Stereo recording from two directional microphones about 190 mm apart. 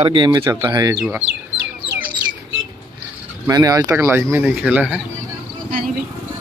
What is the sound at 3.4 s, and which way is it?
Speech, 20° right (ahead or behind).